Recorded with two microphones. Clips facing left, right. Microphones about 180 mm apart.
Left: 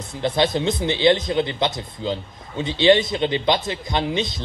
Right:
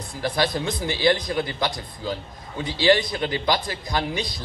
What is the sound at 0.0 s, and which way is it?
A man's voice, 25° left (ahead or behind).